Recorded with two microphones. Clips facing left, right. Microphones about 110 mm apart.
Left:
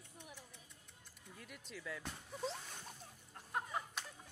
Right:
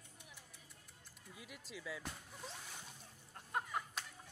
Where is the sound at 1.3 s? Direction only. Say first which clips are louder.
Even; 5° right (ahead or behind).